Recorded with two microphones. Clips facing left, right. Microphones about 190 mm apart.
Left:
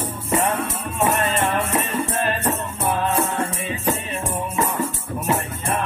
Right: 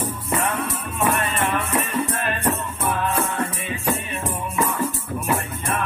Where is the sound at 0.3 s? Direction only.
25° left (ahead or behind).